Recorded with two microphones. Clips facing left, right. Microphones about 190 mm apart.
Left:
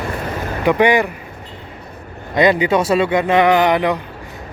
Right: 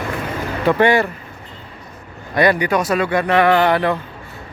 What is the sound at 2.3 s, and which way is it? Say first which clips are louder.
A man's voice: left 2 dB; 20° left (ahead or behind).